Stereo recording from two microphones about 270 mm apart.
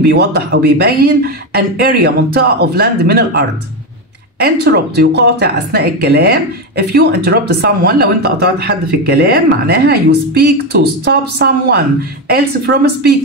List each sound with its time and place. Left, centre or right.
0.0 s a woman's voice: right